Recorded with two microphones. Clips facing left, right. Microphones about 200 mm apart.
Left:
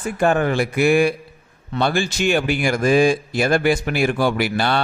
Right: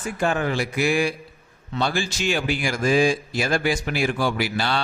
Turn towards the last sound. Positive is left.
turn(degrees=55)  # may be behind; listen again after turning